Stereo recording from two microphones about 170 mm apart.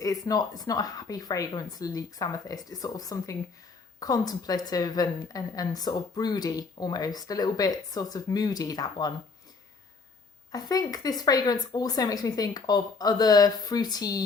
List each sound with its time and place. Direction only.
0.0 s a woman's voice: 20° left (ahead or behind)
10.5 s a woman's voice: 20° left (ahead or behind)